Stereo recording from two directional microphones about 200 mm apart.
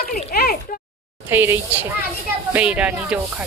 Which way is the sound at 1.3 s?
10° right (ahead or behind).